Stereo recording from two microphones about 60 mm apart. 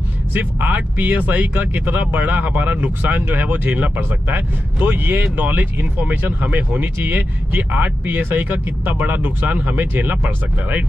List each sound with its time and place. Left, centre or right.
0.3 s speech: right